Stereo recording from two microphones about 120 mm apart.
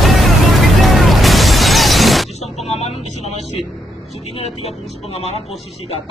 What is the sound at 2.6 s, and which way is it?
Speech, 60° left (ahead or behind).